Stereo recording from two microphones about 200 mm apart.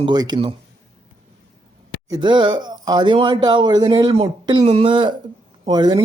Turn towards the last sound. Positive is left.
turn(degrees=-20)  # may be behind; listen again after turning